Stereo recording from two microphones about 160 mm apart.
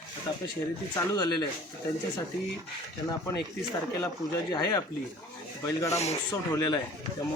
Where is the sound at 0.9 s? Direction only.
25° left (ahead or behind).